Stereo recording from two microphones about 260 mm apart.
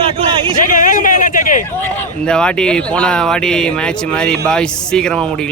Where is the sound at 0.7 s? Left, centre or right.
Left.